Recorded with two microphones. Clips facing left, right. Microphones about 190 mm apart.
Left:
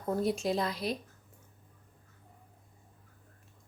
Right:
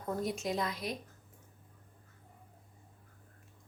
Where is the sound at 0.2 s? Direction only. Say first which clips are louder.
Left 4 dB; 30° left (ahead or behind).